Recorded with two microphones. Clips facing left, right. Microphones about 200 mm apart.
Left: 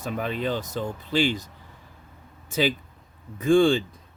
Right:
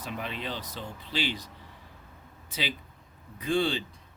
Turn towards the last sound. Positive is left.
turn(degrees=50)  # may be behind; listen again after turning